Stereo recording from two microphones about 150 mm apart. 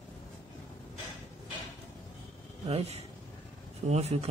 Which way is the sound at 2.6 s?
45° right (ahead or behind).